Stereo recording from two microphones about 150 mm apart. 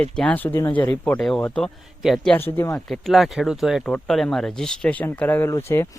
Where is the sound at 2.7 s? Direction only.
Centre (ahead or behind); by 5.9 s 15° left (ahead or behind).